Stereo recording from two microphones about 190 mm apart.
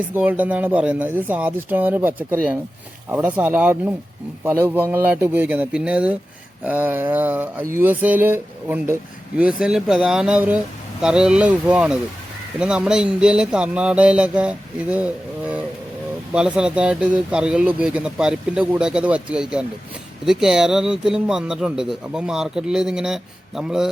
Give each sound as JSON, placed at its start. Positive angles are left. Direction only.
{"t": 0.1, "sound": "speech", "side_deg": -10}